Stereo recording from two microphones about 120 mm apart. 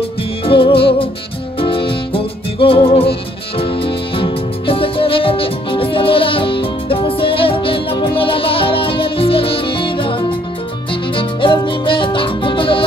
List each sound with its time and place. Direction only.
0.5 s music: 50° left (ahead or behind)